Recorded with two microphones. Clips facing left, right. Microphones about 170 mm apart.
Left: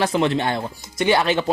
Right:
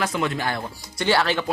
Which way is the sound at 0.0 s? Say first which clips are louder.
Left 5 dB; 30° left (ahead or behind).